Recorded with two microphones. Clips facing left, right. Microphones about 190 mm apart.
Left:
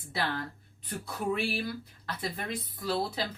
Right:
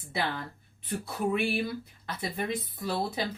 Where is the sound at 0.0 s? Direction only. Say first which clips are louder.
Right 1 dB; 20° right (ahead or behind).